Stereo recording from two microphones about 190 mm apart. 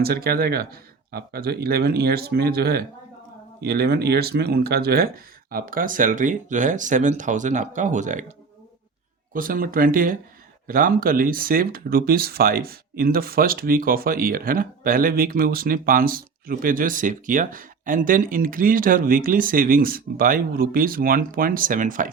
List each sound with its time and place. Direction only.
0.0 s speech: 55° right (ahead or behind)
9.3 s speech: 50° right (ahead or behind)